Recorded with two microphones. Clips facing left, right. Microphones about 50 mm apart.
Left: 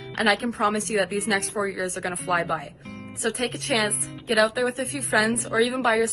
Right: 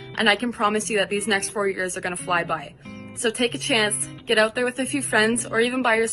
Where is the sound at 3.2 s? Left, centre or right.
Right.